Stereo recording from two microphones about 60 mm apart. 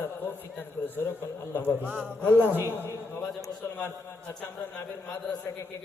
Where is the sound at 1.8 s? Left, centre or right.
Right.